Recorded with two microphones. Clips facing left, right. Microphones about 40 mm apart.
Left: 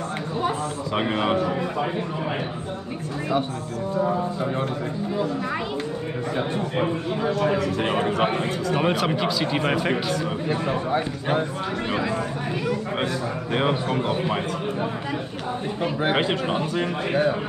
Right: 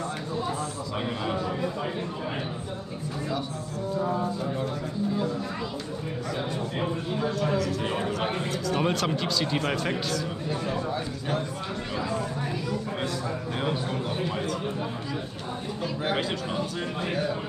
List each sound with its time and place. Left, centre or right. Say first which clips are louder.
0.9 s speech: left 8 dB; left
6.3 s a man's voice: left 6 dB; left
8.7 s speech: left 4 dB; left
10.5 s a man's voice: left 6 dB; left
12.6 s a man's voice: left 5 dB; left